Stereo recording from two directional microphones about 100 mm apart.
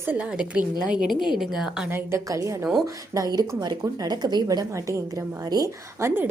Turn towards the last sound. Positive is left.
turn(degrees=-25)  # may be behind; listen again after turning